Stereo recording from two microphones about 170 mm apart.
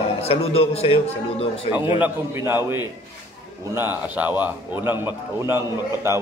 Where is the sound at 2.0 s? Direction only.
10° right (ahead or behind).